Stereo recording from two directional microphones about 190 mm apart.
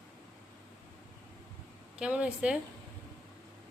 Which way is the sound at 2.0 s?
5° right (ahead or behind).